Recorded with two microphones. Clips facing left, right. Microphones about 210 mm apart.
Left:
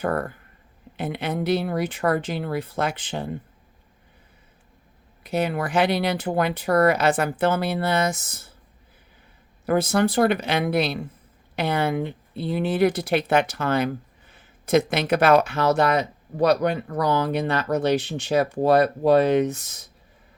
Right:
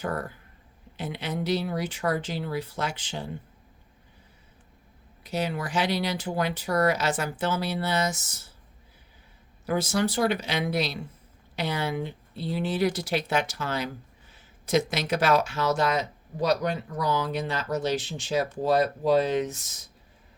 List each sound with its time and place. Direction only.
0.0 s speech: 55° left (ahead or behind)
5.2 s speech: 55° left (ahead or behind)
9.6 s speech: 55° left (ahead or behind)